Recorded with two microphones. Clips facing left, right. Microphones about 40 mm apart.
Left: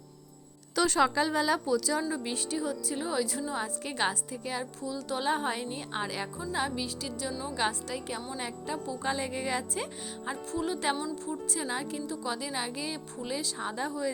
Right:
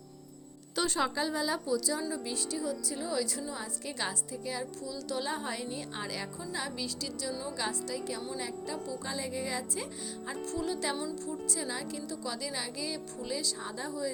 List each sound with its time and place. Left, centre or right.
0.9 s a woman's voice: left
3.5 s a woman's voice: left
4.8 s a woman's voice: left
7.5 s a woman's voice: left
10.6 s speech: left
13.8 s a woman's voice: left